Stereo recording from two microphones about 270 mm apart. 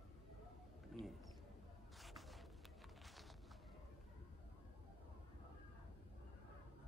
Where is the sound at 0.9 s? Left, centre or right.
Centre.